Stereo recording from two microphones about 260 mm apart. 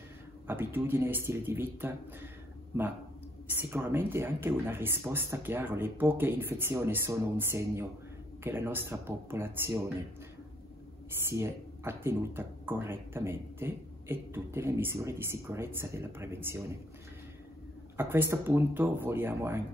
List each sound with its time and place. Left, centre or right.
0.5 s speech: centre
11.2 s speech: centre
17.9 s speech: centre